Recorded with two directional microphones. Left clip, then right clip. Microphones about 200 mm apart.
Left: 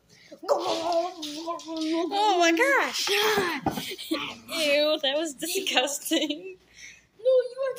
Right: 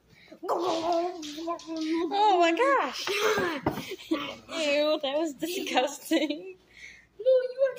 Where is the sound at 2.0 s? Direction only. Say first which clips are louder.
Even; 5° right (ahead or behind).